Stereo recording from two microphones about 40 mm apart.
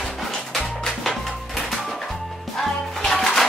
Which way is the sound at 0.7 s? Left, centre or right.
Left.